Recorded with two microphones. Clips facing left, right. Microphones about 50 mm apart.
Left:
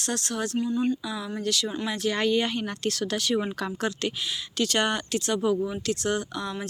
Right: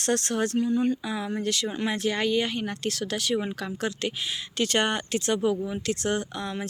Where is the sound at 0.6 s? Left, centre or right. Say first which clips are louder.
Even; right.